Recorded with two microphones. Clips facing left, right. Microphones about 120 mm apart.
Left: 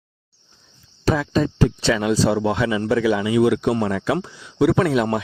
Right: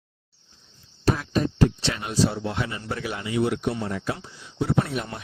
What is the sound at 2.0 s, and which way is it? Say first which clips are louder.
Speech: left 4 dB; 90° left.